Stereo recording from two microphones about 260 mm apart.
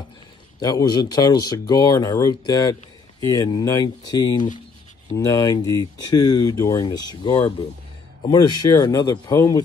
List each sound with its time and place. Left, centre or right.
0.6 s speech: centre